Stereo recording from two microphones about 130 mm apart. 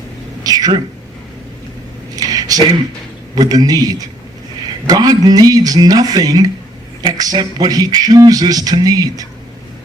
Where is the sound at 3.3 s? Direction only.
30° right (ahead or behind).